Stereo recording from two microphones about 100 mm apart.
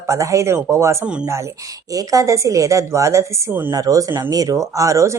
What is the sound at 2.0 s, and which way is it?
Speech, 35° right (ahead or behind).